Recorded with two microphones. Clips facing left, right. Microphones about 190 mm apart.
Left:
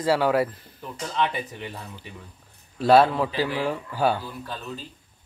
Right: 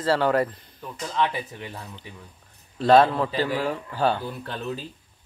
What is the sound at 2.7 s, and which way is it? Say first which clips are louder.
Speech: even; 10° left (ahead or behind).